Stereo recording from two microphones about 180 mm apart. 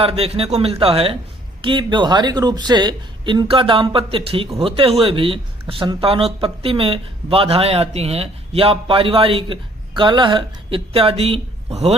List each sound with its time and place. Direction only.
0.0 s speech: 30° right (ahead or behind)